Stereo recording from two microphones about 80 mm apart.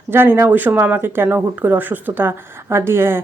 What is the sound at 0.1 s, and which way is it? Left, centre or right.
Speech, right.